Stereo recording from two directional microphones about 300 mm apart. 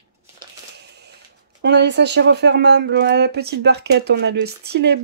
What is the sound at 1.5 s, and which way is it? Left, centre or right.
Speech, right.